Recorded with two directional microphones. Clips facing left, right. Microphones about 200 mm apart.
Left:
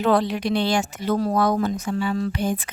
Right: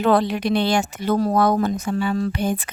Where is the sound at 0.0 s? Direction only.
60° right (ahead or behind).